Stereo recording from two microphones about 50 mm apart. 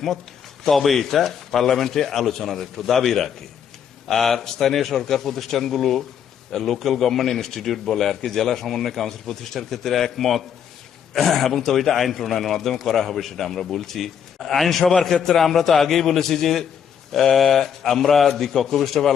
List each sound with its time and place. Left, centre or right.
0.6 s a man's voice: centre